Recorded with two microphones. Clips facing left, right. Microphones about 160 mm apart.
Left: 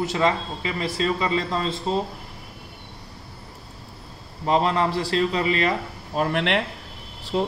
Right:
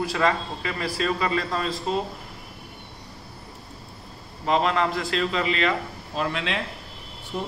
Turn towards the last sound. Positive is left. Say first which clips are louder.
# left 7 dB
turn(degrees=85)